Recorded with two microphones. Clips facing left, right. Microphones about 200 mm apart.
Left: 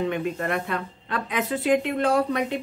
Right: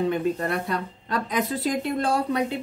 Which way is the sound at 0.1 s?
35° right (ahead or behind).